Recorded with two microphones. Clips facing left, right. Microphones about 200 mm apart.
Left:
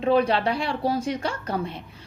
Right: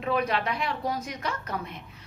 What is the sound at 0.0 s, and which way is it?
A woman's voice, 30° left (ahead or behind).